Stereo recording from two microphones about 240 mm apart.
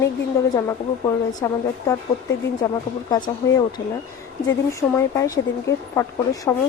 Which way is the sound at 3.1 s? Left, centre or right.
Centre.